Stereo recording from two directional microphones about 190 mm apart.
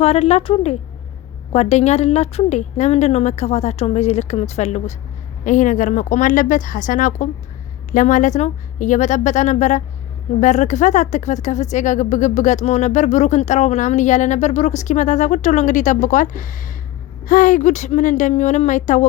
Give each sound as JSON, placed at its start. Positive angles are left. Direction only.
{"t": 0.0, "sound": "speech", "side_deg": 35}